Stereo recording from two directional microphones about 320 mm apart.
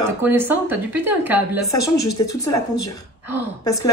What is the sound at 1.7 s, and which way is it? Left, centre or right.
Speech, left.